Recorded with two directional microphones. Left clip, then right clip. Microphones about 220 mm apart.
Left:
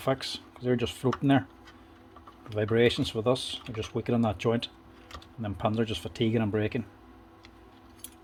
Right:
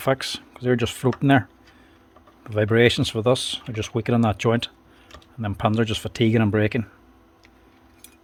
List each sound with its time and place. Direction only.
0.0 s speech: 40° right (ahead or behind)